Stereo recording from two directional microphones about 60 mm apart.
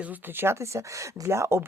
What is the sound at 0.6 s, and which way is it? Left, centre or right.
Speech, right.